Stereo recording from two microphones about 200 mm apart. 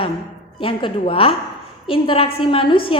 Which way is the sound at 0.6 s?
25° left (ahead or behind).